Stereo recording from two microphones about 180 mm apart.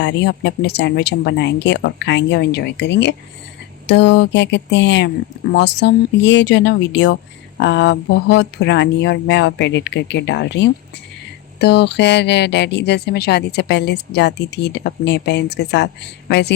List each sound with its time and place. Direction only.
0.0 s speech: 80° left